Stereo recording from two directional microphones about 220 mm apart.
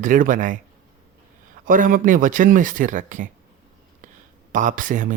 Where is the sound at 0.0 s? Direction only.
35° right (ahead or behind).